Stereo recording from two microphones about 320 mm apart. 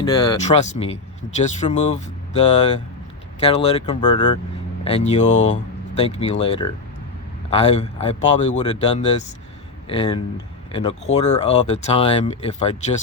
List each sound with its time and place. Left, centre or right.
0.0 s speech: centre